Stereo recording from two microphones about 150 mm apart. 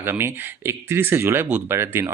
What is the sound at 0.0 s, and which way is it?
Speech, 15° right (ahead or behind).